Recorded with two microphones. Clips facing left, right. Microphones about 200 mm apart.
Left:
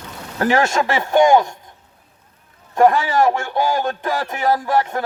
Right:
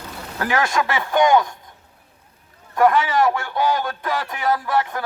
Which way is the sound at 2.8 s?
40° left (ahead or behind).